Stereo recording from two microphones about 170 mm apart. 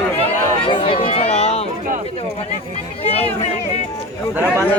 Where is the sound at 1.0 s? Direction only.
35° left (ahead or behind).